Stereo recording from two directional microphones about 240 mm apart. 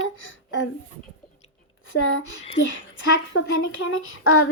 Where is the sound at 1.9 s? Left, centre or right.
Left.